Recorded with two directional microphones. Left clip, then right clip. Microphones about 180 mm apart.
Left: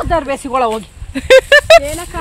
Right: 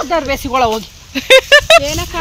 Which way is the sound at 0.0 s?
30° right (ahead or behind).